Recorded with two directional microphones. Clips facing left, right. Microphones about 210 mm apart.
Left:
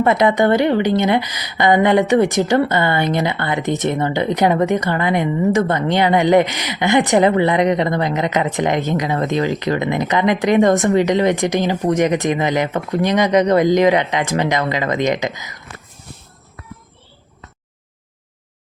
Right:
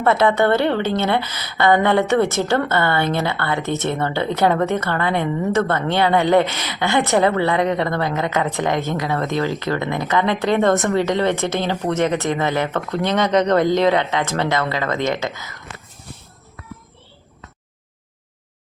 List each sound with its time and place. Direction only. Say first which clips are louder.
0.0 s a woman's voice: left 2 dB; 15° left (ahead or behind)